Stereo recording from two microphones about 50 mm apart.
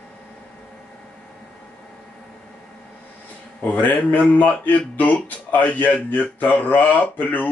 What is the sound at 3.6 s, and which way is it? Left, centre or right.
A man's voice, left.